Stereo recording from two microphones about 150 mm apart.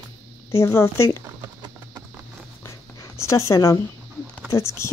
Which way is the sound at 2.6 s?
20° left (ahead or behind).